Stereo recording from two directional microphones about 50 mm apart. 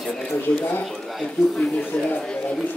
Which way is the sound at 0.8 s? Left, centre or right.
Centre.